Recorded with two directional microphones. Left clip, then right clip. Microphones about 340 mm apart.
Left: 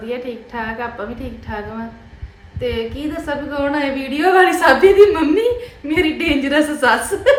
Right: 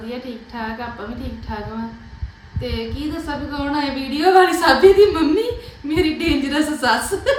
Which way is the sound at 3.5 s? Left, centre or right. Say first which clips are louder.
Left 3 dB; centre.